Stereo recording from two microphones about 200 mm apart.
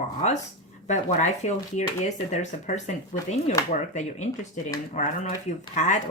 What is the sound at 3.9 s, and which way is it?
Speech, 35° left (ahead or behind).